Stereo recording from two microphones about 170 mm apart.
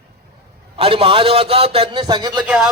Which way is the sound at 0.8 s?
35° right (ahead or behind).